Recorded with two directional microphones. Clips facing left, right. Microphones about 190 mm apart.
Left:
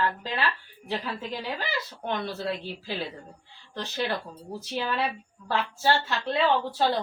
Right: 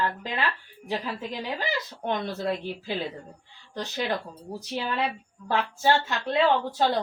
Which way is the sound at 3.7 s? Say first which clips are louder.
Right 1 dB; 15° right (ahead or behind).